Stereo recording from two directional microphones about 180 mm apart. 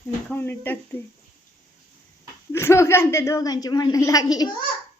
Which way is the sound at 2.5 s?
15° left (ahead or behind).